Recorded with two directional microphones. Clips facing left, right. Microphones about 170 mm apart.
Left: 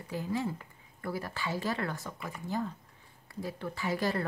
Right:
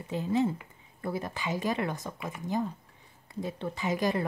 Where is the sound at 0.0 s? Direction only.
20° right (ahead or behind).